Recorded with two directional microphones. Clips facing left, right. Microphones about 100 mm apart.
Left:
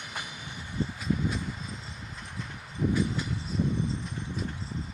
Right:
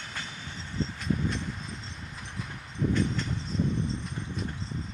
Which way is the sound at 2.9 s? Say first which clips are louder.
Even; 10° left (ahead or behind).